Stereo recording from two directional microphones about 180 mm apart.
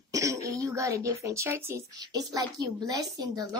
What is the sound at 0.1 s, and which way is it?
A woman's voice, 15° right (ahead or behind).